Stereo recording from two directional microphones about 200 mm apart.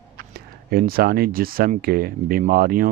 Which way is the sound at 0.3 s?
50° right (ahead or behind).